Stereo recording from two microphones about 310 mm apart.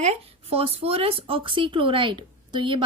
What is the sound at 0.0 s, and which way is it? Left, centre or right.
Speech, centre.